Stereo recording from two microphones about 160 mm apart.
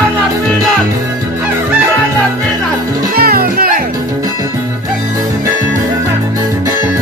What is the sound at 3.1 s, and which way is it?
Music, 70° right (ahead or behind).